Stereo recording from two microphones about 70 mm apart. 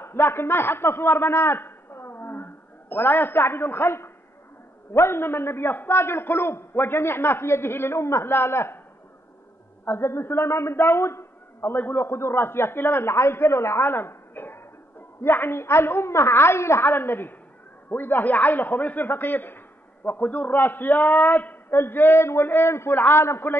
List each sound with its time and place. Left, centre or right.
0.0 s a man's voice: left
9.8 s a man's voice: left